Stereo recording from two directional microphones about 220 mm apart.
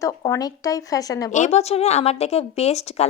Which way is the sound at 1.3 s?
30° left (ahead or behind).